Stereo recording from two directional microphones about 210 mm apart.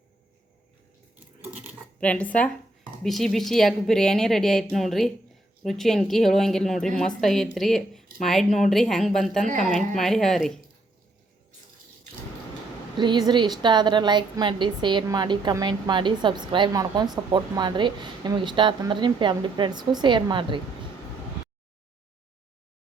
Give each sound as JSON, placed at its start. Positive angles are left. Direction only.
{"t": 2.0, "sound": "a woman's voice", "side_deg": 5}
{"t": 13.0, "sound": "a woman's voice", "side_deg": -20}